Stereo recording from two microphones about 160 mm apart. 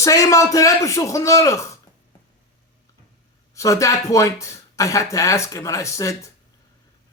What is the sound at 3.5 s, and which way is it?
Speech, 20° left (ahead or behind).